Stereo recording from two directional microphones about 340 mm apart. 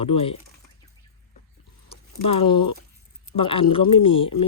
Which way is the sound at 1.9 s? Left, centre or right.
Centre.